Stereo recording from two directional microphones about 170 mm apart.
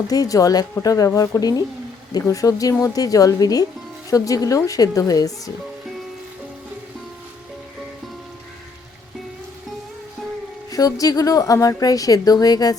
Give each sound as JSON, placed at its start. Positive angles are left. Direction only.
{"t": 0.1, "sound": "a woman's voice", "side_deg": 20}
{"t": 10.7, "sound": "a woman's voice", "side_deg": 20}